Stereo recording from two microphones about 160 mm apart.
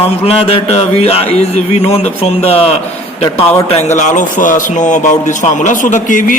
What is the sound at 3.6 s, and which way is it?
A man's voice, 45° left (ahead or behind).